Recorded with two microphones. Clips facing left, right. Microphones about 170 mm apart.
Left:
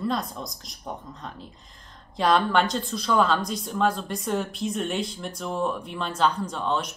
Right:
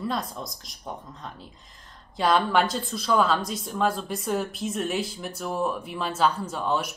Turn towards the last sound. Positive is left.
turn(degrees=-5)  # may be behind; listen again after turning